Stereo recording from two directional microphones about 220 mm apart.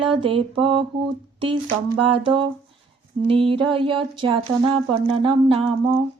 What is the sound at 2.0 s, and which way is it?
Speech, 25° right (ahead or behind).